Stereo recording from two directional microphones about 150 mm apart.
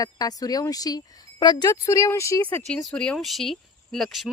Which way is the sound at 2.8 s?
5° left (ahead or behind).